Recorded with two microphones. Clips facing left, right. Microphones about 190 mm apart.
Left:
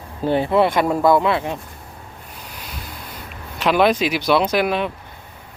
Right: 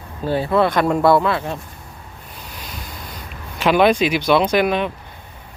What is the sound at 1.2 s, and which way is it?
Speech, 20° left (ahead or behind).